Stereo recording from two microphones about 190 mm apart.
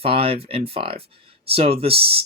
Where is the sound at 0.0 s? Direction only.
30° right (ahead or behind).